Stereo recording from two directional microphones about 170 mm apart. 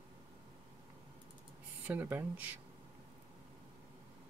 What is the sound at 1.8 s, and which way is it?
Speech, 10° right (ahead or behind).